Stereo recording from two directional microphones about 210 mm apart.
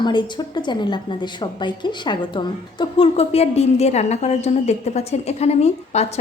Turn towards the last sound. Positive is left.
turn(degrees=30)  # may be behind; listen again after turning